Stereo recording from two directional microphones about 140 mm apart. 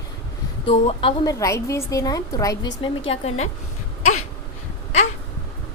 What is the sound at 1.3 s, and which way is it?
Speech, 25° left (ahead or behind).